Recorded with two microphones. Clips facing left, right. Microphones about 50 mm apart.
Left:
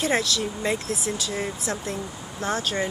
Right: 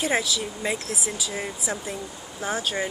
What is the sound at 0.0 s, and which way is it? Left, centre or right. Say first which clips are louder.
Speech: left 1 dB; centre.